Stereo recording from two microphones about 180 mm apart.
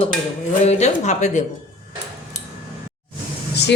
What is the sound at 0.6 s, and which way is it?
Speech, 40° left (ahead or behind).